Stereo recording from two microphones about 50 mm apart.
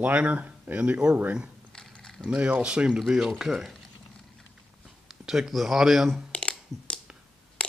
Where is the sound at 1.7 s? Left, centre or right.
Centre.